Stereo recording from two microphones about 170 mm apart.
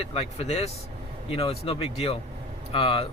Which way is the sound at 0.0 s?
35° left (ahead or behind).